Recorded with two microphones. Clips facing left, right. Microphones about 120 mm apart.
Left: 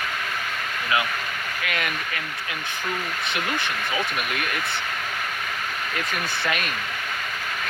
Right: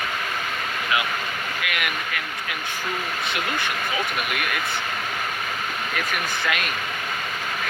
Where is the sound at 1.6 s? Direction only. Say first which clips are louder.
Left 1 dB; 30° left (ahead or behind).